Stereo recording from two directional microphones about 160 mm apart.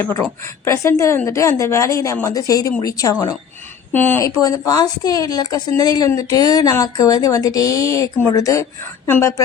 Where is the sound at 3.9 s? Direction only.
10° left (ahead or behind).